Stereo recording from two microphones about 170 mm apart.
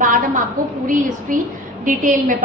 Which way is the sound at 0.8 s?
50° right (ahead or behind).